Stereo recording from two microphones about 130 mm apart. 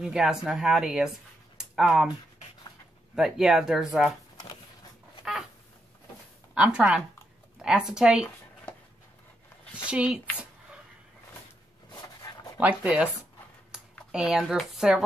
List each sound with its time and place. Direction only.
0.0 s a woman's voice: 5° right (ahead or behind)
3.2 s a woman's voice: 5° right (ahead or behind)
6.5 s a woman's voice: 10° right (ahead or behind)
9.8 s speech: 10° right (ahead or behind)
11.9 s a sound: 30° left (ahead or behind)
12.5 s speech: 10° right (ahead or behind)
13.7 s computer keyboard: 5° right (ahead or behind)
14.1 s a woman's voice: 5° right (ahead or behind)